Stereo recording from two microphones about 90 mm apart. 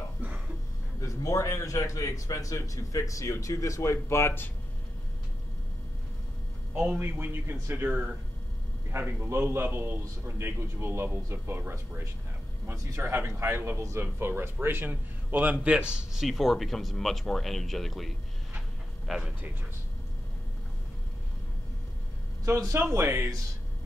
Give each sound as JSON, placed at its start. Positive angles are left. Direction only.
{"t": 0.2, "sound": "a sound", "side_deg": -20}
{"t": 1.0, "sound": "a man's voice", "side_deg": 35}
{"t": 6.7, "sound": "a man's voice", "side_deg": -15}
{"t": 7.0, "sound": "a man's voice", "side_deg": -25}
{"t": 22.4, "sound": "a man's voice", "side_deg": -35}